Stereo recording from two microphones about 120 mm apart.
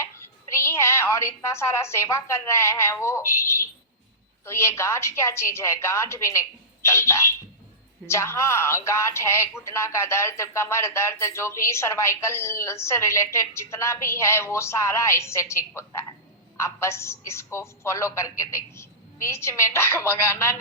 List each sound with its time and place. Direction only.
0.0 s a woman's voice: 20° left (ahead or behind)